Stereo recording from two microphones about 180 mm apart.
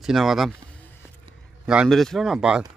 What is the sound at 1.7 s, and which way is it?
Speech, centre (ahead or behind).